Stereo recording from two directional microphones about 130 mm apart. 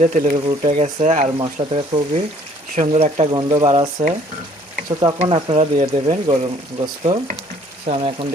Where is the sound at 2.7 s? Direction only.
55° right (ahead or behind).